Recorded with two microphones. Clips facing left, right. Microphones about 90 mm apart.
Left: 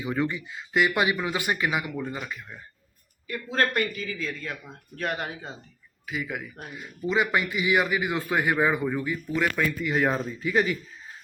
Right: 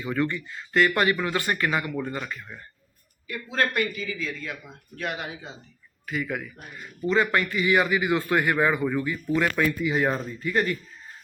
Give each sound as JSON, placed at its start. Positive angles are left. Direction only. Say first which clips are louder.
{"t": 0.0, "sound": "a man's voice", "louder": "right 1 dB", "side_deg": 15}
{"t": 3.2, "sound": "a man's voice", "louder": "left 1 dB", "side_deg": 30}
{"t": 6.1, "sound": "a man's voice", "louder": "right 3 dB", "side_deg": 5}